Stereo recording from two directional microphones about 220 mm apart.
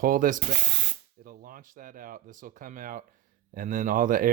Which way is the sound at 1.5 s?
40° right (ahead or behind).